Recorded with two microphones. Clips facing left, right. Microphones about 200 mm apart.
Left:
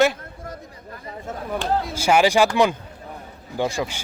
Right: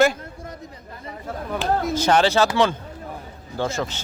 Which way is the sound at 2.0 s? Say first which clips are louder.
Left 2 dB; 10° left (ahead or behind).